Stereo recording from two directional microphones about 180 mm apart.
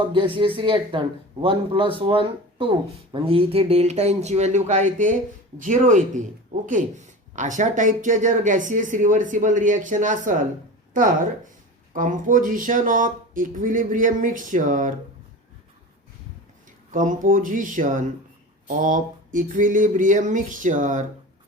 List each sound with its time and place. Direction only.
0.1 s speech: 25° right (ahead or behind); by 14.9 s 45° right (ahead or behind)
16.9 s speech: 45° right (ahead or behind)